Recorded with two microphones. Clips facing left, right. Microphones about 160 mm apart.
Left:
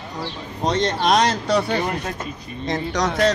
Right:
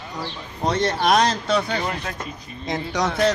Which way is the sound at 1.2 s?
15° left (ahead or behind).